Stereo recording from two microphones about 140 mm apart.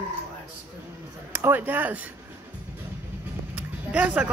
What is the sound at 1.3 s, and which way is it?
Speech, 15° right (ahead or behind).